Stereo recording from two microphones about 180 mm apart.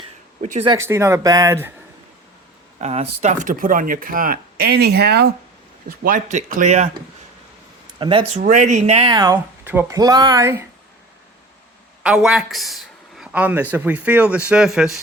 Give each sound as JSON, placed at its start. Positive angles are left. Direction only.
{"t": 0.8, "sound": "speech", "side_deg": -15}
{"t": 2.8, "sound": "speech", "side_deg": -35}
{"t": 5.9, "sound": "speech", "side_deg": -50}
{"t": 7.9, "sound": "speech", "side_deg": -30}
{"t": 8.4, "sound": "speech", "side_deg": -45}
{"t": 9.1, "sound": "speech", "side_deg": -20}
{"t": 12.0, "sound": "speech", "side_deg": -5}